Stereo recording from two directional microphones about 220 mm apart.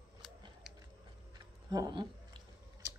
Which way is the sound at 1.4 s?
20° right (ahead or behind).